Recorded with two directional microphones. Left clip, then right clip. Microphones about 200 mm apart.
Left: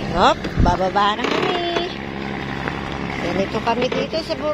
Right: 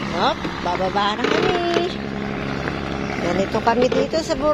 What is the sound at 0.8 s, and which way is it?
Speech, 15° left (ahead or behind).